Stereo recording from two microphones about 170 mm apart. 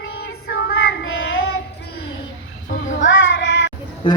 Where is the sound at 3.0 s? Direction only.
90° left.